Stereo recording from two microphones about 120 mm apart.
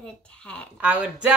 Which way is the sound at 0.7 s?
10° right (ahead or behind).